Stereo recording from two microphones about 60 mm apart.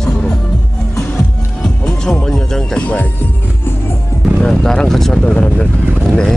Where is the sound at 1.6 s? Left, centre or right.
Centre.